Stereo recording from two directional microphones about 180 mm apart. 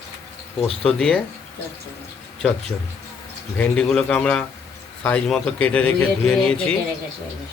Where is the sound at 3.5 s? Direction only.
5° left (ahead or behind).